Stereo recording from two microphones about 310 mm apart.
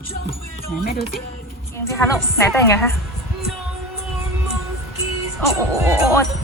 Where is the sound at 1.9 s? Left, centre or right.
Centre.